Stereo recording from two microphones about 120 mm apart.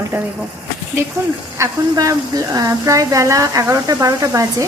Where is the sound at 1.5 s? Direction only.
25° right (ahead or behind).